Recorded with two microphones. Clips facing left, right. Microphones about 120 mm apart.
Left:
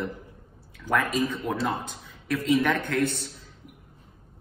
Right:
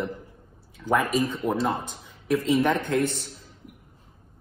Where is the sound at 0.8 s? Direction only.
15° right (ahead or behind).